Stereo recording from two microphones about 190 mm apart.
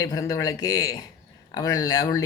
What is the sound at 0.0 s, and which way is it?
Speech, 20° left (ahead or behind).